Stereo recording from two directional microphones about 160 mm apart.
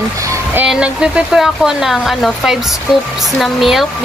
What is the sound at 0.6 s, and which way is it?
Speech, 5° right (ahead or behind).